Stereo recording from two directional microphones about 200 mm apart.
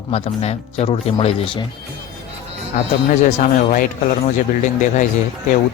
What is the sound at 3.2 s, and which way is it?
Speech, 40° left (ahead or behind).